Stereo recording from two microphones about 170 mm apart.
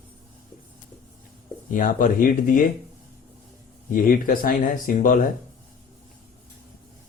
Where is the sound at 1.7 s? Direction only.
55° left (ahead or behind).